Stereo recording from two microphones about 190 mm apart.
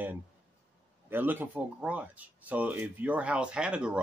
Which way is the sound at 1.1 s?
10° right (ahead or behind).